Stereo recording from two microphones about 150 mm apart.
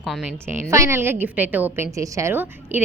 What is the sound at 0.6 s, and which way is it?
A woman's voice, 20° right (ahead or behind).